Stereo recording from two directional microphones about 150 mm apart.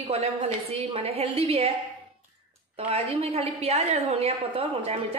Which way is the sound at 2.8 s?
40° right (ahead or behind).